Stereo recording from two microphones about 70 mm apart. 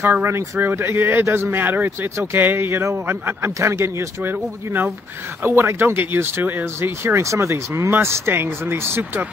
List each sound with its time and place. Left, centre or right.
0.0 s speech: right